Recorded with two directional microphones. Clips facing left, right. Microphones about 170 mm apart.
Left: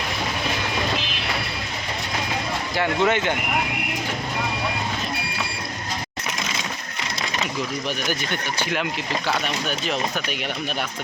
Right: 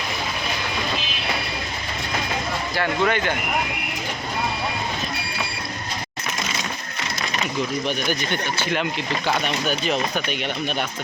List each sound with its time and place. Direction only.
2.7 s speech: 20° left (ahead or behind)
7.9 s speech: 5° left (ahead or behind)